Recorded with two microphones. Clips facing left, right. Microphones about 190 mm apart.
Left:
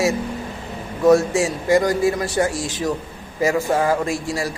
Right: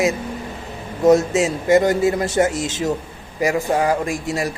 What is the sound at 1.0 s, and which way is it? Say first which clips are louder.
Speech: right 1 dB; 20° right (ahead or behind).